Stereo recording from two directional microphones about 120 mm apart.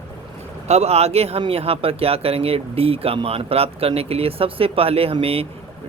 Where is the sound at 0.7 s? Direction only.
60° right (ahead or behind).